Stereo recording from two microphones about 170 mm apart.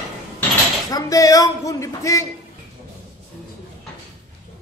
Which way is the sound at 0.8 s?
20° left (ahead or behind).